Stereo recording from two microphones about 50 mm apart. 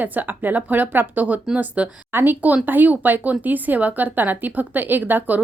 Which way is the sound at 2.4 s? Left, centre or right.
Right.